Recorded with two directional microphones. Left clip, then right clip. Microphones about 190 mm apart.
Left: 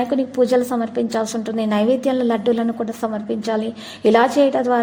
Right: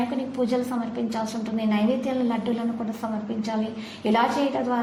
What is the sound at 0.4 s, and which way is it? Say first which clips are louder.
A woman's voice: left 9 dB; 45° left (ahead or behind).